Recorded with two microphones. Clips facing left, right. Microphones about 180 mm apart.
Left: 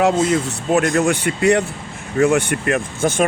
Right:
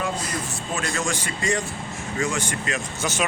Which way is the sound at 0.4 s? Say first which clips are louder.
Left 11 dB; 65° left (ahead or behind).